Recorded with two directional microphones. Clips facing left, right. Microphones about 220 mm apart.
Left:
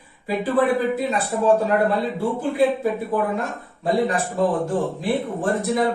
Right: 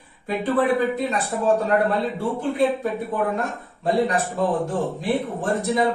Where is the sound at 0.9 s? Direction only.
Centre (ahead or behind).